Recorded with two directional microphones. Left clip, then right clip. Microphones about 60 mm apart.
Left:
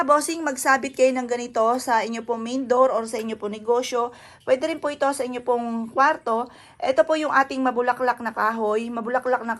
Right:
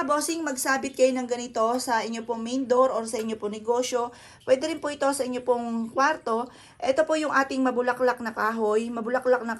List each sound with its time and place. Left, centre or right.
0.0 s speech: centre; by 9.6 s right